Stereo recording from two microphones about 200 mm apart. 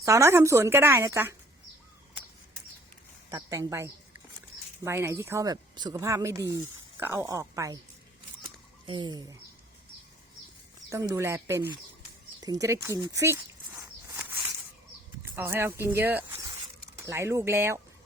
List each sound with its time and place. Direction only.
0.0 s speech: 15° right (ahead or behind)
3.2 s speech: 15° right (ahead or behind)
8.9 s speech: 20° right (ahead or behind)
10.8 s speech: 15° right (ahead or behind)
12.4 s walk: 15° right (ahead or behind)
15.4 s speech: 10° right (ahead or behind)